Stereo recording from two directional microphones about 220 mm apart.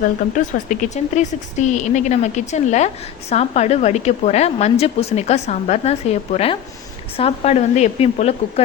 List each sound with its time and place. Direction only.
0.0 s speech: 35° left (ahead or behind)